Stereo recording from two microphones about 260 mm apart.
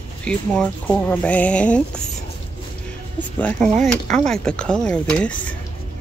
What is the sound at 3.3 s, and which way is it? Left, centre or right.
Speech, centre.